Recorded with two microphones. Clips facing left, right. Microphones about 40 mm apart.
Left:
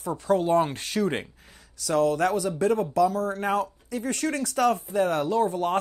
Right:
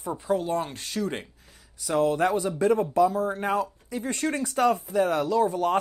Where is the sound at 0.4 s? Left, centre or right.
Left.